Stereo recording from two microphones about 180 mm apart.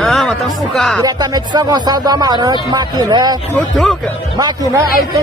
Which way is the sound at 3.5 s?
Centre (ahead or behind).